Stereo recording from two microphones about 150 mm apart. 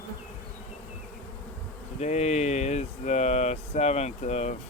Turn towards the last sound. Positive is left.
turn(degrees=50)  # may be behind; listen again after turning